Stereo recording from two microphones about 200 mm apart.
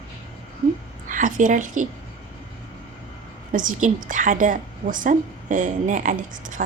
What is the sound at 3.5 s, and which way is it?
A woman's voice, 40° right (ahead or behind).